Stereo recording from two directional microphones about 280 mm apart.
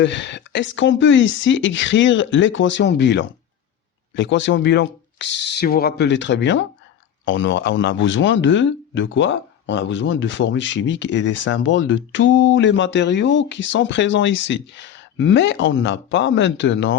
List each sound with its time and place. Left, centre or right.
0.0 s speech: left